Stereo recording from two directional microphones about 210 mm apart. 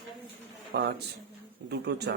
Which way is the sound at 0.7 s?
50° right (ahead or behind).